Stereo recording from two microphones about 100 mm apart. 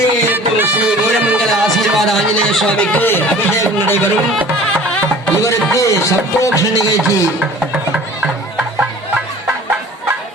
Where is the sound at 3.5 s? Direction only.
25° left (ahead or behind).